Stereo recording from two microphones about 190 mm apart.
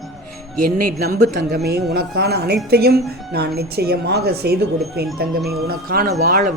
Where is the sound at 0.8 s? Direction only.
50° right (ahead or behind).